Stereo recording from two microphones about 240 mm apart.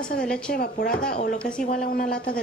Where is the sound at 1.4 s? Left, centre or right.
Centre.